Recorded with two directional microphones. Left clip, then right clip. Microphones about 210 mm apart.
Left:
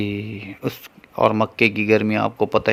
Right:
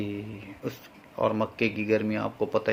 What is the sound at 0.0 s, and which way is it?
Speech, 55° left (ahead or behind).